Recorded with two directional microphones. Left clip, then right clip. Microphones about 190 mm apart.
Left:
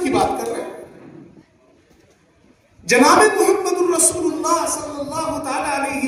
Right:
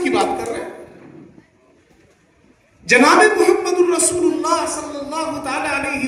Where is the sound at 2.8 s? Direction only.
70° left (ahead or behind).